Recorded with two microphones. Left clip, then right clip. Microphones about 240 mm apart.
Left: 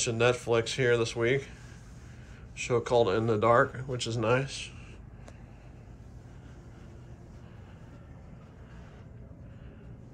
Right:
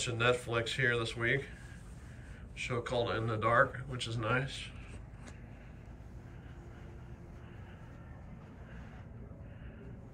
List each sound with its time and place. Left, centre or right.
0.0 s speech: centre
2.5 s speech: centre